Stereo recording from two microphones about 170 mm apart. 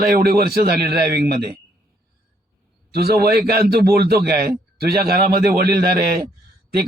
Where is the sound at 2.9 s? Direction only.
65° right (ahead or behind).